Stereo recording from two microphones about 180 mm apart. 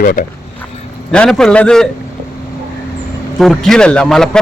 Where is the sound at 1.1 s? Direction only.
5° left (ahead or behind).